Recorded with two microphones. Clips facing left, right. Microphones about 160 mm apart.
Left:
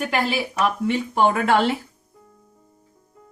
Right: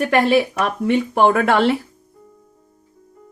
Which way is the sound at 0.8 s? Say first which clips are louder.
Right 7 dB; 60° right (ahead or behind).